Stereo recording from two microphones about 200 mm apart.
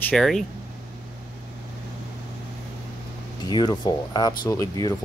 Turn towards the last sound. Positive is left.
turn(degrees=15)  # may be behind; listen again after turning